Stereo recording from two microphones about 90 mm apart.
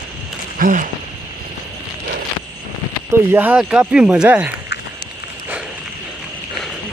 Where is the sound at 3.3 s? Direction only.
20° right (ahead or behind).